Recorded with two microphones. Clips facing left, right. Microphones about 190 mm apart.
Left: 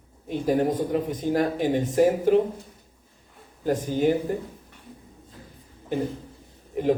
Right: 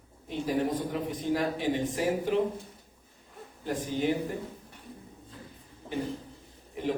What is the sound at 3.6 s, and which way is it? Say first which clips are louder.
Speech: left 7 dB; 45° left (ahead or behind).